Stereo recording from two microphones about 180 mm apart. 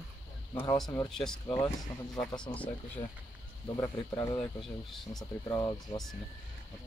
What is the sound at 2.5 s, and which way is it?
Speech, 15° left (ahead or behind).